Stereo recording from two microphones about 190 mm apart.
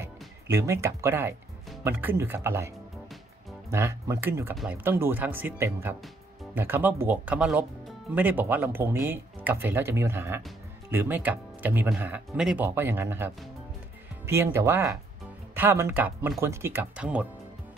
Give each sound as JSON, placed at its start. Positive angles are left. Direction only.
{"t": 0.0, "sound": "speech", "side_deg": -15}
{"t": 3.7, "sound": "speech", "side_deg": -15}